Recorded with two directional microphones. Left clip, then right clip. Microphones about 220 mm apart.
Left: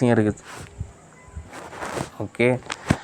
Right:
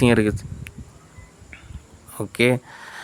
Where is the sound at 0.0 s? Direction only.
25° right (ahead or behind).